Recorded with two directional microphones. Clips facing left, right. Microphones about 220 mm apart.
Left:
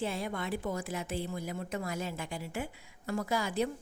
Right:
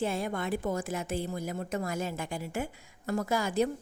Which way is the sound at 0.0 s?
45° right (ahead or behind).